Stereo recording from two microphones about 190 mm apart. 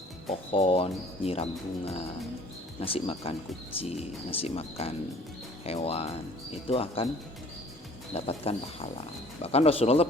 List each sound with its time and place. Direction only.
0.5 s speech: 30° left (ahead or behind)
8.1 s speech: 30° left (ahead or behind)